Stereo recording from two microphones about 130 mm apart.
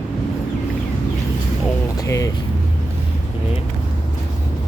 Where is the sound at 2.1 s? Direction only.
25° left (ahead or behind).